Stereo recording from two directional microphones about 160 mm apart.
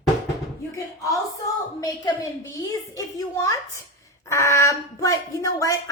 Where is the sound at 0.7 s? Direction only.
20° left (ahead or behind).